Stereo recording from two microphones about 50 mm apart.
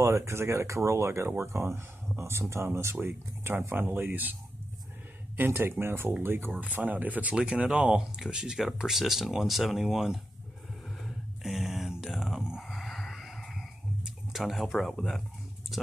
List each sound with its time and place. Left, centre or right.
0.0 s speech: right
3.0 s speech: right
5.4 s speech: right
6.5 s speech: right
7.3 s speech: centre
11.1 s a sound: centre
15.7 s speech: centre